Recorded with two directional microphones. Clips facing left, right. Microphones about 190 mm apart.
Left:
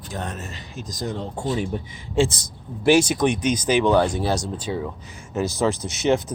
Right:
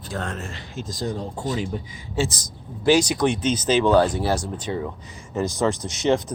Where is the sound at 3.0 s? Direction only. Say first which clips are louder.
Left 1 dB; 20° left (ahead or behind).